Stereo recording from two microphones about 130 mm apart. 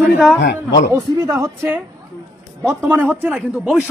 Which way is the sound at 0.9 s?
25° right (ahead or behind).